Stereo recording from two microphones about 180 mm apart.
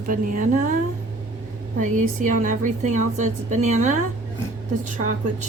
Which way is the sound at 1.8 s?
45° right (ahead or behind).